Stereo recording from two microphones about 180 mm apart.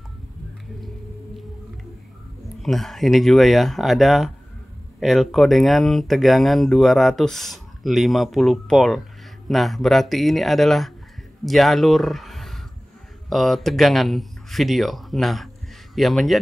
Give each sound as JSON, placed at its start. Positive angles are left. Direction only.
{"t": 2.6, "sound": "speech", "side_deg": 0}